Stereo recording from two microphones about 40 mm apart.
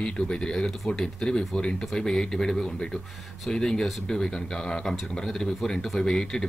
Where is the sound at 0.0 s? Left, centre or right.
Left.